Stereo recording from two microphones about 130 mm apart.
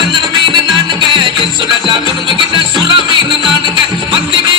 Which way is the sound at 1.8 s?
40° right (ahead or behind).